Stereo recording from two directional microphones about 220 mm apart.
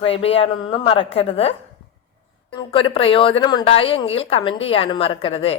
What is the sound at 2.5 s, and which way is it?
Speech, 25° left (ahead or behind).